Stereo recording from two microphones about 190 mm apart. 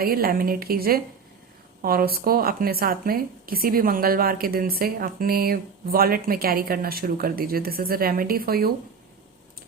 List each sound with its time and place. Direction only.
0.0 s a woman's voice: 50° right (ahead or behind)